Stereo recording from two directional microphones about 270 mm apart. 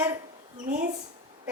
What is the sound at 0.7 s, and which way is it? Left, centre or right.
Speech, right.